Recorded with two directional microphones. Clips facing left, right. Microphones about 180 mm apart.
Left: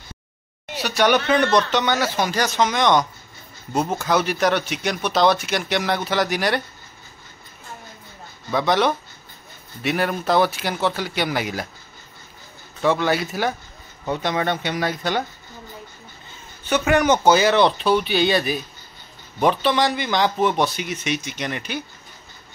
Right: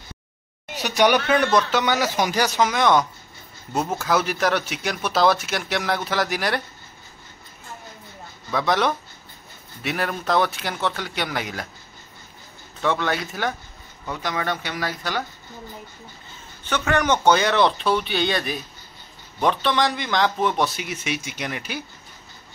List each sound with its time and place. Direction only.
0.8 s speech: 15° right (ahead or behind)
8.5 s speech: centre (ahead or behind)
12.8 s speech: 5° left (ahead or behind)
14.0 s speech: 25° left (ahead or behind)
16.6 s speech: 10° left (ahead or behind); by 21.8 s 5° right (ahead or behind)